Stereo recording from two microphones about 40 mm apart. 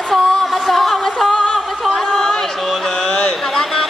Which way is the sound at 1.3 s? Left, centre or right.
Centre.